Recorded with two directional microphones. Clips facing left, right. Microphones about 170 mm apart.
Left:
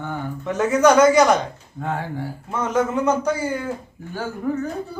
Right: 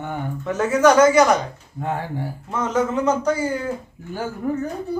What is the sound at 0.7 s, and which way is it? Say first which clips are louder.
Speech: even; 15° left (ahead or behind).